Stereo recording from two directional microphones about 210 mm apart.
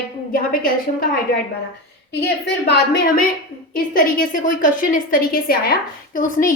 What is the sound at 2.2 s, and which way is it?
Speech, 50° left (ahead or behind).